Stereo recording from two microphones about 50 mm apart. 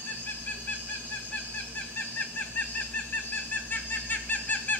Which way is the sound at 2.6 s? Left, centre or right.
Left.